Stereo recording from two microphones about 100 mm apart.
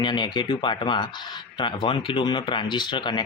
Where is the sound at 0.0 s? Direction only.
50° left (ahead or behind).